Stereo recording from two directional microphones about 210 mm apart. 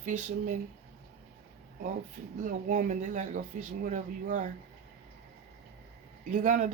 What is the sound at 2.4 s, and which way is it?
Speech, 35° right (ahead or behind).